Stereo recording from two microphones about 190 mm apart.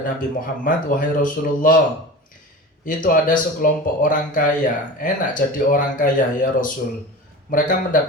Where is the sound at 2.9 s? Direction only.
45° left (ahead or behind).